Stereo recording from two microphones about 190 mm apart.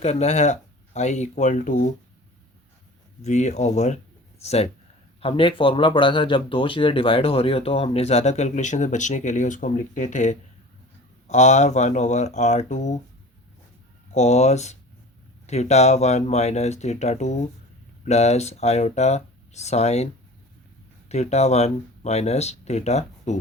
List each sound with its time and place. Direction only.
0.0 s speech: 35° left (ahead or behind)
3.2 s speech: 35° left (ahead or behind)
14.1 s speech: 35° left (ahead or behind)
21.1 s speech: 35° left (ahead or behind)